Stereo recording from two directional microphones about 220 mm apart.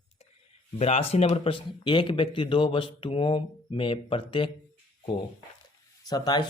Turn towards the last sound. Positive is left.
turn(degrees=15)  # may be behind; listen again after turning